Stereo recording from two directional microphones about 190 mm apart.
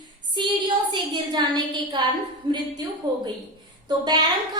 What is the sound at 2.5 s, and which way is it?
Speech, 20° right (ahead or behind).